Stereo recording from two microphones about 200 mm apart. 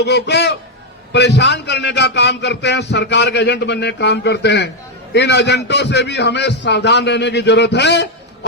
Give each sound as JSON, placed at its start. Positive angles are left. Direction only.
{"t": 0.0, "sound": "a man's voice", "side_deg": 55}